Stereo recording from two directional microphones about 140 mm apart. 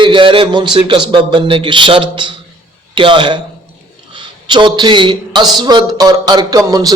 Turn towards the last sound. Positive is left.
turn(degrees=-25)  # may be behind; listen again after turning